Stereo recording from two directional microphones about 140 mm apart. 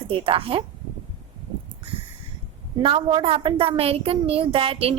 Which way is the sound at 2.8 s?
40° right (ahead or behind).